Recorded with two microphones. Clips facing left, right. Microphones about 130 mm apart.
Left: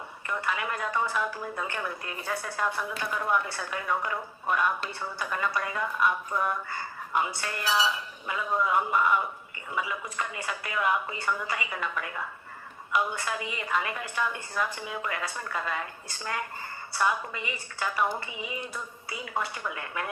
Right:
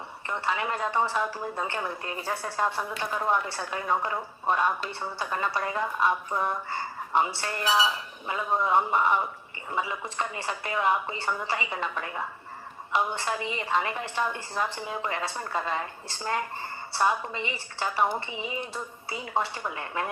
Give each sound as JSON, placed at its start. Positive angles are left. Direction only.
{"t": 0.3, "sound": "a woman's voice", "side_deg": -30}